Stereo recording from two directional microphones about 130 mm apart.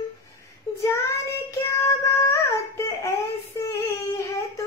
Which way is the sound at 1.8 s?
20° left (ahead or behind).